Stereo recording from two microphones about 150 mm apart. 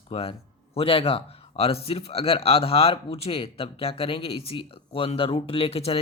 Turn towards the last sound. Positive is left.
turn(degrees=40)  # may be behind; listen again after turning